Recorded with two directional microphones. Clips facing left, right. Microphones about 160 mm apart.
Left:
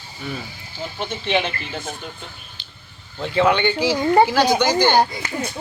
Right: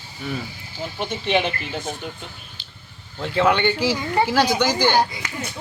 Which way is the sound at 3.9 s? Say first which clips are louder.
Left 6 dB; 50° left (ahead or behind).